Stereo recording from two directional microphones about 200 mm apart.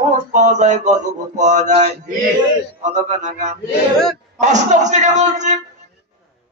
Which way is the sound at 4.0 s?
Centre (ahead or behind).